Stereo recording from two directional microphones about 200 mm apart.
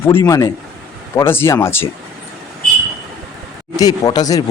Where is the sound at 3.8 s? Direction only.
20° left (ahead or behind).